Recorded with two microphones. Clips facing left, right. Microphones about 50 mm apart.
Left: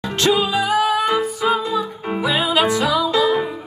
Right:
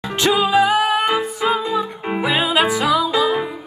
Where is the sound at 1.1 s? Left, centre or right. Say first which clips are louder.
Even; centre.